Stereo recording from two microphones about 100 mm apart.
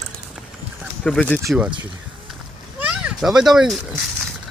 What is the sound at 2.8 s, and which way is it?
Children playing, 10° right (ahead or behind).